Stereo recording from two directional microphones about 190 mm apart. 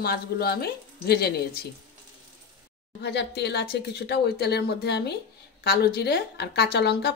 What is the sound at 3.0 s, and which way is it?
Speech, 60° left (ahead or behind).